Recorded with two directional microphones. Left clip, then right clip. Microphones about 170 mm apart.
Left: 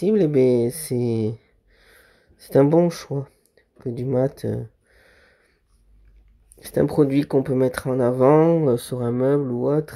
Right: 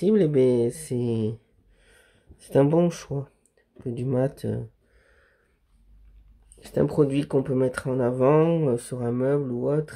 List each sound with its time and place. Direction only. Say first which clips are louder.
0.0 s speech: left 2 dB; 10° left (ahead or behind)
1.0 s speech: left 3 dB; 5° right (ahead or behind)
2.9 s a sound: left 4 dB; 10° left (ahead or behind)
6.6 s speech: left 3 dB; 15° left (ahead or behind)
8.2 s speech: left 5 dB; centre (ahead or behind)
8.6 s speech: left 4 dB; 25° left (ahead or behind)